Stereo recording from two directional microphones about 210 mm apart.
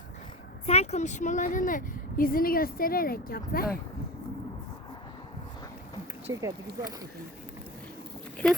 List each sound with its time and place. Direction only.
0.6 s a woman's voice: 30° left (ahead or behind)
6.3 s speech: 15° right (ahead or behind)
8.4 s speech: 5° left (ahead or behind)